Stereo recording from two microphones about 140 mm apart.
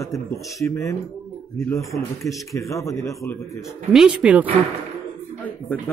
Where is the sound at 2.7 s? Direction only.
25° left (ahead or behind).